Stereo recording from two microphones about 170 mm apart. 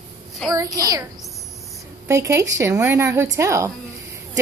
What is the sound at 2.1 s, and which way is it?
A woman's voice, 15° right (ahead or behind).